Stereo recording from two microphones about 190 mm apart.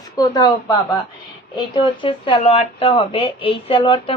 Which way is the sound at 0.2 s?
20° left (ahead or behind).